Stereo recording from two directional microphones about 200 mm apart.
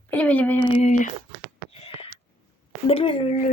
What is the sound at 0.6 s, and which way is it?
Speech, 20° left (ahead or behind).